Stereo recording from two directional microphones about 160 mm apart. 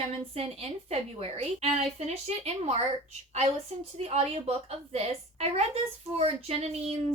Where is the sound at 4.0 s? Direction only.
40° right (ahead or behind).